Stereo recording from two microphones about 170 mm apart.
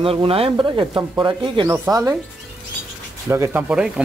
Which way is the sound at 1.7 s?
15° right (ahead or behind).